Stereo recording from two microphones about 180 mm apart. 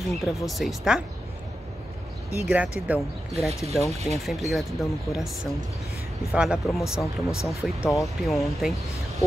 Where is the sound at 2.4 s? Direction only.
5° right (ahead or behind).